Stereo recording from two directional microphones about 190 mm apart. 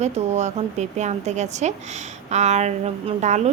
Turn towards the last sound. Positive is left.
turn(degrees=-40)  # may be behind; listen again after turning